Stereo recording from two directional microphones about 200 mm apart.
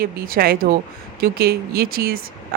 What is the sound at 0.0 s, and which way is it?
Speech, 50° right (ahead or behind).